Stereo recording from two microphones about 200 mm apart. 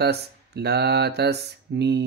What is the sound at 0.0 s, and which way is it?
Mantra, 55° right (ahead or behind).